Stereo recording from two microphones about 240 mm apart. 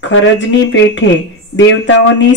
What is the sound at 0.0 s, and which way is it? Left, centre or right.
A woman's voice, left.